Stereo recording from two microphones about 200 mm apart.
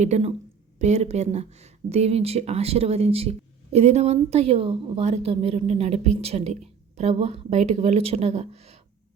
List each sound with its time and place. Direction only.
0.0 s speech: 35° right (ahead or behind)